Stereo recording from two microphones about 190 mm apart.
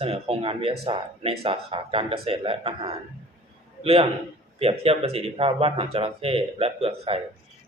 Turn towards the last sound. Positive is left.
turn(degrees=-30)  # may be behind; listen again after turning